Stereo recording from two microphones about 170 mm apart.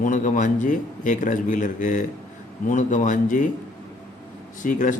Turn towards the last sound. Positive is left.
turn(degrees=50)  # may be behind; listen again after turning